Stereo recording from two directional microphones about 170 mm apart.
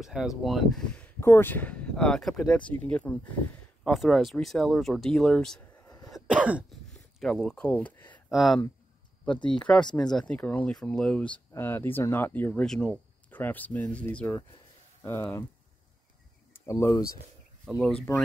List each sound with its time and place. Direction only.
0.0 s speech: 5° right (ahead or behind)
5.9 s cough: 20° left (ahead or behind)
6.1 s cough: 5° right (ahead or behind)
6.9 s a sound: centre (ahead or behind)
8.3 s speech: centre (ahead or behind); by 15.4 s 15° left (ahead or behind)
16.6 s speech: 20° left (ahead or behind)
17.6 s speech: centre (ahead or behind)